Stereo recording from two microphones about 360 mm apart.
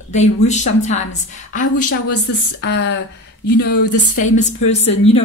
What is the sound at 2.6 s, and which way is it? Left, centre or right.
A man's voice, left.